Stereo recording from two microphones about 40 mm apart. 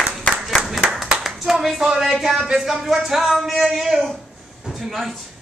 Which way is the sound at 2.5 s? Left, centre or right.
Centre.